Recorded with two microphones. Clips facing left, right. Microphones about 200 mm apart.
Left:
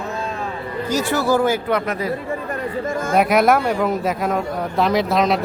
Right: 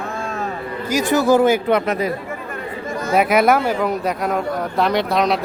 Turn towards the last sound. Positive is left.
turn(degrees=0)  # may be behind; listen again after turning